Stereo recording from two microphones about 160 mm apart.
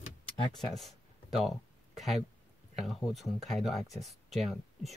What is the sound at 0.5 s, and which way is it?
Speech, centre (ahead or behind).